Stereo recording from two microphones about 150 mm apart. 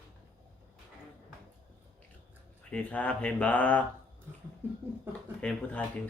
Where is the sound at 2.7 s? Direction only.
10° left (ahead or behind).